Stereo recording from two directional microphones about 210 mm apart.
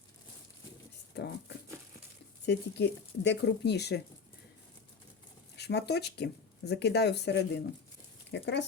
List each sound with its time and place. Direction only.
1.1 s a sound: 55° left (ahead or behind)
2.5 s speech: 55° left (ahead or behind)
5.5 s speech: 50° left (ahead or behind)